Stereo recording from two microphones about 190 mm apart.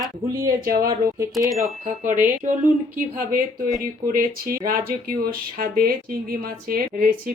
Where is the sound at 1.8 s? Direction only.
45° right (ahead or behind).